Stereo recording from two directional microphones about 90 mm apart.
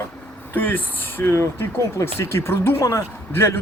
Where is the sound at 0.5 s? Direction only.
20° left (ahead or behind).